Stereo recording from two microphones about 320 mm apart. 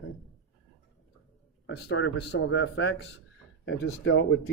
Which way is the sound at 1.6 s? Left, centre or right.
Left.